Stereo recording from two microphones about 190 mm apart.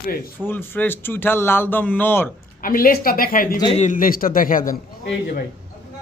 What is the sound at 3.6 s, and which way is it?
Speech, 25° left (ahead or behind).